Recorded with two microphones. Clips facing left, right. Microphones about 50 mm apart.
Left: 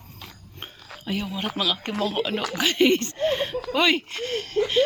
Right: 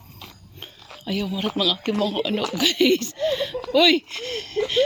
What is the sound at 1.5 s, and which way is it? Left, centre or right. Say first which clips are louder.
A woman's voice: right 3 dB; left.